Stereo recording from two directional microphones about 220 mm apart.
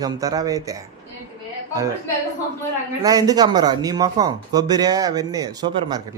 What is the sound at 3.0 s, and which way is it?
Speech, 15° right (ahead or behind).